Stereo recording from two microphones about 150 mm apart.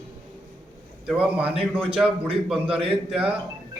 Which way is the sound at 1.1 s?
5° right (ahead or behind).